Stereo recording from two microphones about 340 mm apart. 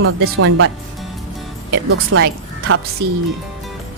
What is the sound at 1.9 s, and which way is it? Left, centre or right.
Speech, right.